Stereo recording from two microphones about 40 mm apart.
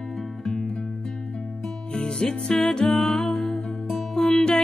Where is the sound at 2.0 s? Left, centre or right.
Left.